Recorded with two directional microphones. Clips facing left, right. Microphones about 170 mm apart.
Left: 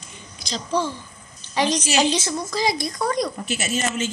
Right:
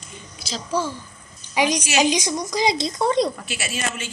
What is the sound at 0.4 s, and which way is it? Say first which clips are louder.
A woman's voice: left 1 dB; 5° right (ahead or behind).